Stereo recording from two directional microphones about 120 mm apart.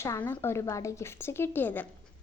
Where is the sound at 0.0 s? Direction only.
20° left (ahead or behind).